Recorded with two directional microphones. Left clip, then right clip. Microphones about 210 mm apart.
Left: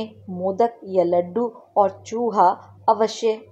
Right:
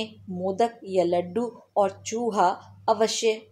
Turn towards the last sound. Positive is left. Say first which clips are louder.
# left 4 dB
turn(degrees=10)  # may be behind; listen again after turning